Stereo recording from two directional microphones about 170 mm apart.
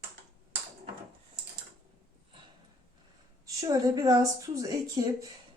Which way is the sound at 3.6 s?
20° right (ahead or behind).